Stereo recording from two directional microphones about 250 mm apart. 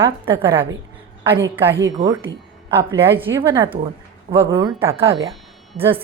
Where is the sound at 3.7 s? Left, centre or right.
Right.